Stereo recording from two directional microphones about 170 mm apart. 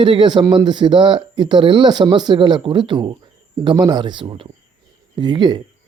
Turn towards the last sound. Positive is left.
turn(degrees=-25)  # may be behind; listen again after turning